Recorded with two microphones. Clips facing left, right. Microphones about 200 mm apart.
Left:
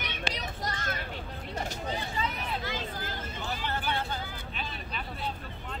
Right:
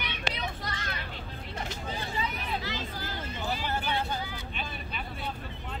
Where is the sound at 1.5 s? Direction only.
45° left (ahead or behind).